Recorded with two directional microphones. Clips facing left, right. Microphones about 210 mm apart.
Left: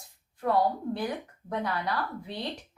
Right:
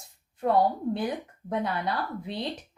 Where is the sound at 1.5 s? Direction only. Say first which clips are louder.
Right 2 dB; 20° right (ahead or behind).